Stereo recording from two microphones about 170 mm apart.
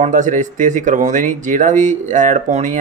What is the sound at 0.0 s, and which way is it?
Speech, 45° right (ahead or behind).